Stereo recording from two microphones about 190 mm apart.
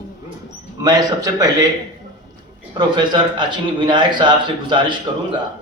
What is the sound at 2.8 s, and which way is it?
A man's voice, 25° right (ahead or behind).